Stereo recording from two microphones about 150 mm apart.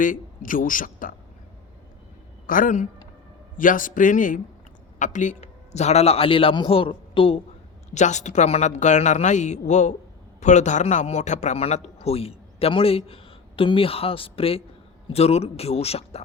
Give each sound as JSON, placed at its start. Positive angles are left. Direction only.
{"t": 0.0, "sound": "a man's voice", "side_deg": 65}
{"t": 2.5, "sound": "a man's voice", "side_deg": 65}
{"t": 7.9, "sound": "a man's voice", "side_deg": 50}